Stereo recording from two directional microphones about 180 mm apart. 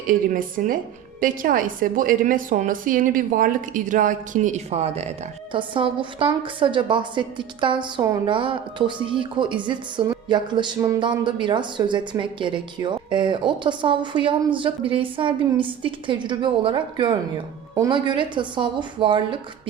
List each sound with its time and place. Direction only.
0.1 s a woman's voice: 50° right (ahead or behind); by 19.4 s 25° right (ahead or behind)